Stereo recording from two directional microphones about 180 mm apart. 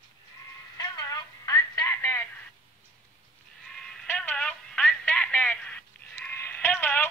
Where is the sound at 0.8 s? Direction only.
20° left (ahead or behind).